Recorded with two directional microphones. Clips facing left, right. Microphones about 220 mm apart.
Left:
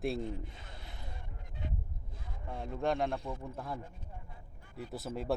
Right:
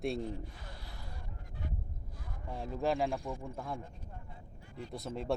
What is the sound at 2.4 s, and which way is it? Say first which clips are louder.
Speech: even; centre (ahead or behind).